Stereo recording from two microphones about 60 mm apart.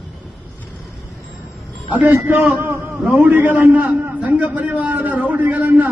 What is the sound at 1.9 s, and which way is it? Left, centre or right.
A man's voice, right.